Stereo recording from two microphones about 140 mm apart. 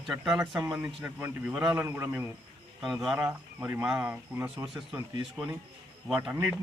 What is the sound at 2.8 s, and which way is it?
Speech, centre (ahead or behind).